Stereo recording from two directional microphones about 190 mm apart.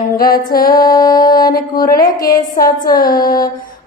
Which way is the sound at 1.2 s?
50° left (ahead or behind).